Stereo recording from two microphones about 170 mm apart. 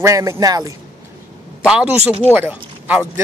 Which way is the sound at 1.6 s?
5° right (ahead or behind).